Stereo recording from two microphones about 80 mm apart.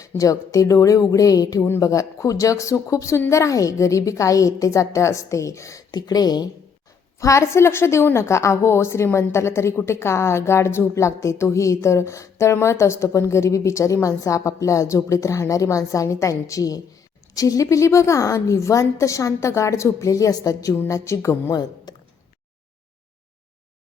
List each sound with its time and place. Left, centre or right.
0.2 s speech: left
5.9 s speech: left
7.2 s a woman's voice: left
20.7 s a woman's voice: left
21.5 s speech: left